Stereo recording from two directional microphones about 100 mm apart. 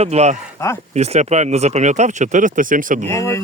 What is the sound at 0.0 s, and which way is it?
Speech, 90° right.